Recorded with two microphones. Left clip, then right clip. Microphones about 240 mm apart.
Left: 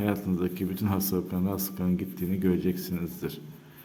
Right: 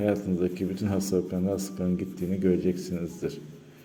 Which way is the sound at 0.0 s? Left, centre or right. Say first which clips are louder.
Right 3 dB; centre.